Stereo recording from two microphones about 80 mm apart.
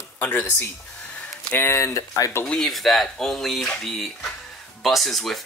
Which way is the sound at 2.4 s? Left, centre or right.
Centre.